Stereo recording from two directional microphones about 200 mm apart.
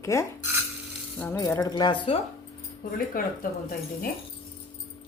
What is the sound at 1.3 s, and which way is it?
Speech, 20° left (ahead or behind).